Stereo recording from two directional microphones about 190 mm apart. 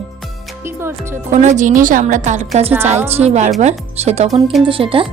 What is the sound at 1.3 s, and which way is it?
A woman's voice, 40° right (ahead or behind).